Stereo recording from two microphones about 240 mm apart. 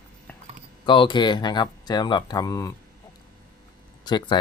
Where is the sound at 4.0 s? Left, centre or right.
Centre.